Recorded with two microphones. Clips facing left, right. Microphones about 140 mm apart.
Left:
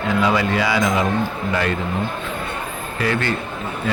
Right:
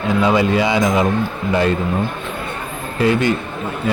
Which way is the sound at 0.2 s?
25° right (ahead or behind).